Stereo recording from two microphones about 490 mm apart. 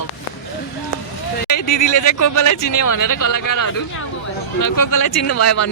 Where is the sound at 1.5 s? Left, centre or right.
Left.